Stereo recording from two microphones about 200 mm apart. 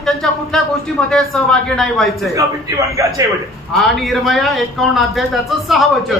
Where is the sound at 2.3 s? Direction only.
15° right (ahead or behind).